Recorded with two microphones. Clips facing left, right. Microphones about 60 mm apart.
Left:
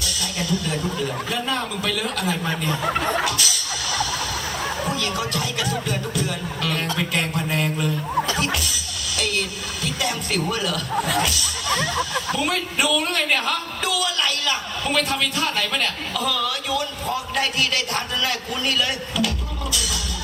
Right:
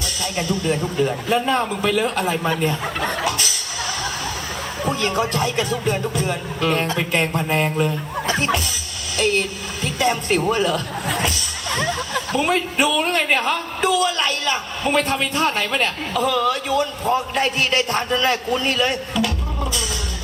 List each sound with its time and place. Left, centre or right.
0.3 s a man's voice: right
3.2 s music: right
4.9 s a man's voice: right
8.3 s music: right
9.1 s a sound: right
9.8 s a man's voice: right